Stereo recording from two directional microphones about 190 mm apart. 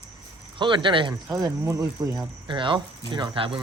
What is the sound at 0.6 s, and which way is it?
Speech, 25° right (ahead or behind).